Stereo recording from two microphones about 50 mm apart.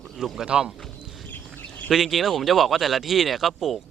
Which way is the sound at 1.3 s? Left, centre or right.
Left.